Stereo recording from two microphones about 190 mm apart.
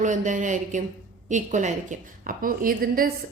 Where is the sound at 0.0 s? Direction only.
40° right (ahead or behind).